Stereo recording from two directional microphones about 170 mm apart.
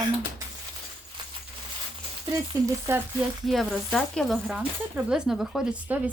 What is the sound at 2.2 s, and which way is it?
Speech, 20° right (ahead or behind).